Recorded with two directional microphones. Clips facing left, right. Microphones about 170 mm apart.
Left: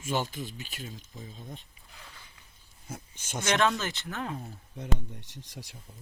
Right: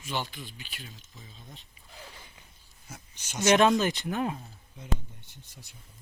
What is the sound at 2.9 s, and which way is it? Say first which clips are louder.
Speech: left 2 dB; 50° left (ahead or behind).